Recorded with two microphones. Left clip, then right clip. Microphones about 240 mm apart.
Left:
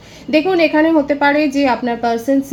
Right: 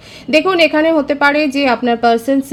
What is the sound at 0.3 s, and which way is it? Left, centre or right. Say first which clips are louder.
A woman's voice: right 2 dB; right.